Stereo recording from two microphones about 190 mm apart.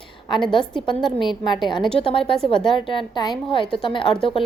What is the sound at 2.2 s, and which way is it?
Speech, 5° left (ahead or behind).